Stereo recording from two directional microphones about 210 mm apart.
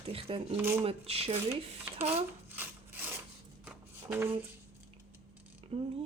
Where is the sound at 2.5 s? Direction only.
10° right (ahead or behind).